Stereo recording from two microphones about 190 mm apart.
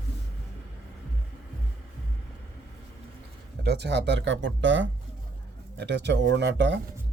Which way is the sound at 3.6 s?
60° right (ahead or behind).